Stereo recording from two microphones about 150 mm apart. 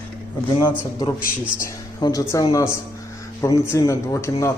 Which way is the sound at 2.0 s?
25° left (ahead or behind).